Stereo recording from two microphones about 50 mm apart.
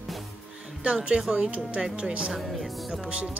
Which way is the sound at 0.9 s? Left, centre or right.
Centre.